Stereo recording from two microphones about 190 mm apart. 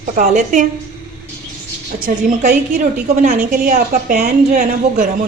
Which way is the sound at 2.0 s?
45° right (ahead or behind).